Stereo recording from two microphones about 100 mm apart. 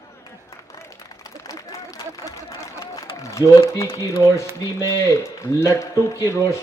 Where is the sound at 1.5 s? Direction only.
35° left (ahead or behind).